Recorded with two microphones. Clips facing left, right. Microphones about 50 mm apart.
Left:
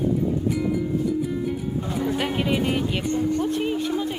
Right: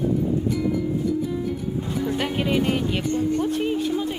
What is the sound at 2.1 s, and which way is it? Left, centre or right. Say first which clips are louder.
Music: right 2 dB; centre.